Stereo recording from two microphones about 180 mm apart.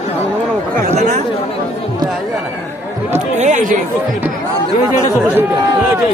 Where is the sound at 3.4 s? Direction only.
45° right (ahead or behind).